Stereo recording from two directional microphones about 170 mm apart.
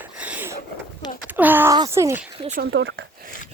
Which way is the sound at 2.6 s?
90° right.